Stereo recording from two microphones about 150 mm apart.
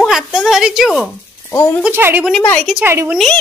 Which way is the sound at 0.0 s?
Centre (ahead or behind).